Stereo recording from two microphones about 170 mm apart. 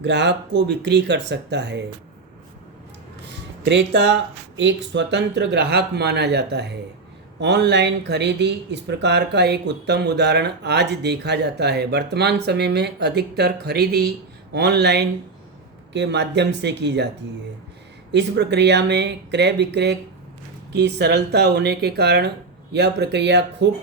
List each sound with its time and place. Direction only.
0.0 s speech: 90° right
3.6 s speech: 90° right
15.9 s speech: 90° right
18.1 s speech: 85° right